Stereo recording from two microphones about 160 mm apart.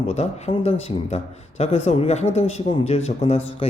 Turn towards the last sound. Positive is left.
turn(degrees=40)  # may be behind; listen again after turning